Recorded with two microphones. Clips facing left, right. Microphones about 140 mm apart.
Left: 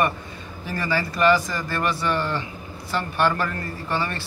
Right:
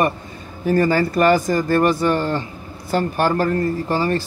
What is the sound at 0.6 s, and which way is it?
Speech, 50° right (ahead or behind).